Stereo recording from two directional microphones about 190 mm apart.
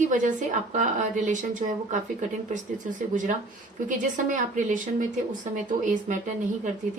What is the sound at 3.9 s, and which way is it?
Speech, 40° right (ahead or behind).